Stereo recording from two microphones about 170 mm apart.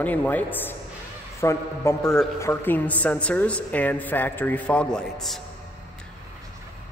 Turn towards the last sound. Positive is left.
turn(degrees=5)  # may be behind; listen again after turning